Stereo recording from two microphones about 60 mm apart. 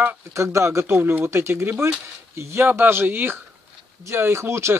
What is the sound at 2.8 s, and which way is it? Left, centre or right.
Speech, right.